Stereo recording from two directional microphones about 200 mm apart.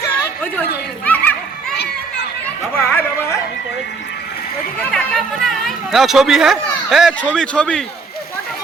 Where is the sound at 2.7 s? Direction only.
10° left (ahead or behind).